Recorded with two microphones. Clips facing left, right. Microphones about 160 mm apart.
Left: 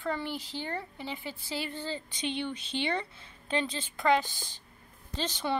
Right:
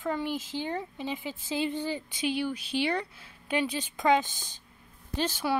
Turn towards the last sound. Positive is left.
turn(degrees=-10)  # may be behind; listen again after turning